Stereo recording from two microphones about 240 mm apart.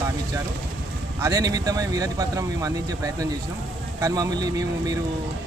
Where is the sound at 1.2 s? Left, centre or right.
Centre.